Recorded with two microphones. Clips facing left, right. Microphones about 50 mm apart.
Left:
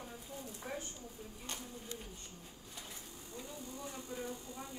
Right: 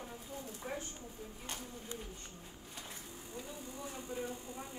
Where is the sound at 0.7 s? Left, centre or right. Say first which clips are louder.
Right 1 dB; right.